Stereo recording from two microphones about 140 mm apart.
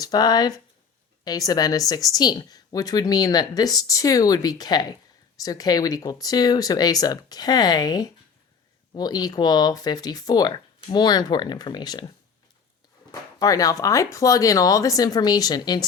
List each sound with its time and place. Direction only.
0.0 s speech: 30° left (ahead or behind)